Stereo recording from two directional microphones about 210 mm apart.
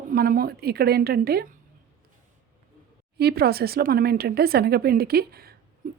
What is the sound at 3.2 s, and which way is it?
Speech, 50° right (ahead or behind).